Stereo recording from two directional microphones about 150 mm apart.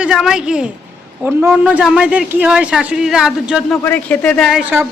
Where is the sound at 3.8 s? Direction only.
10° left (ahead or behind).